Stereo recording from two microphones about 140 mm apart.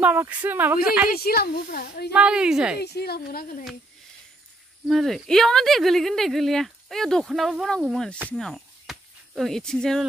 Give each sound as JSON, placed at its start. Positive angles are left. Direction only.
{"t": 0.0, "sound": "speech", "side_deg": -10}
{"t": 1.1, "sound": "speech", "side_deg": 90}
{"t": 2.1, "sound": "speech", "side_deg": -5}
{"t": 3.2, "sound": "speech", "side_deg": 90}
{"t": 4.8, "sound": "speech", "side_deg": 0}